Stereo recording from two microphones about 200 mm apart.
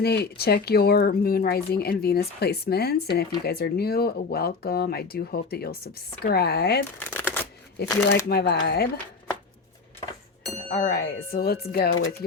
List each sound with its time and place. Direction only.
0.0 s speech: 55° left (ahead or behind)
7.0 s shuffling cards: 10° left (ahead or behind)
7.8 s speech: 55° left (ahead or behind)
10.7 s speech: 45° left (ahead or behind)